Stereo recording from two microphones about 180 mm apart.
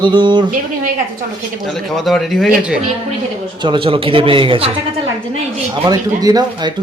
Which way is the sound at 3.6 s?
25° right (ahead or behind).